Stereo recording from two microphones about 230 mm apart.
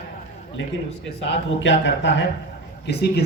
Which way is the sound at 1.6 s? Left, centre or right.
Left.